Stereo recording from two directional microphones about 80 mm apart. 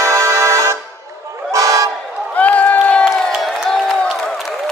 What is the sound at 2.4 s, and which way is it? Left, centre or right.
Crowd, centre.